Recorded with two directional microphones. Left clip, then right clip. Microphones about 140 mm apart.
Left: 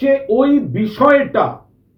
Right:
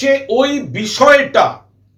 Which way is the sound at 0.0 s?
15° right (ahead or behind).